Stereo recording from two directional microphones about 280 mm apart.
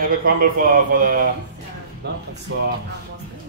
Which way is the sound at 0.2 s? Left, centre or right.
Right.